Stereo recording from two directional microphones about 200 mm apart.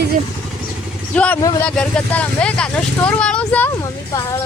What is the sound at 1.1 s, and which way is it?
Speech, 5° left (ahead or behind).